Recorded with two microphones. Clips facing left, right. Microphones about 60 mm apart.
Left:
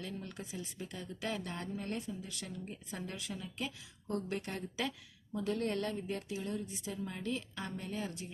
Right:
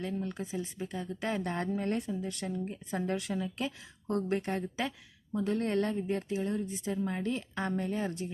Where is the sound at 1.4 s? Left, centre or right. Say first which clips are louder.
Right 8 dB; right.